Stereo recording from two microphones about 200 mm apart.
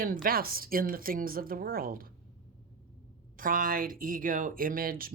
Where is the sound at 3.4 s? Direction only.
45° right (ahead or behind).